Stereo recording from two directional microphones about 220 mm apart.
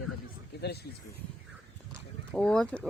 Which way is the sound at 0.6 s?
45° left (ahead or behind).